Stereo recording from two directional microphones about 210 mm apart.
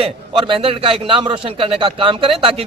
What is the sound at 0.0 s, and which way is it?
A man's voice, 25° right (ahead or behind).